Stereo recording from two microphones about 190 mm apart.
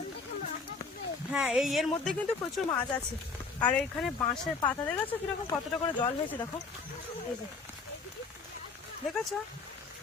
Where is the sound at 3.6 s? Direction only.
5° left (ahead or behind).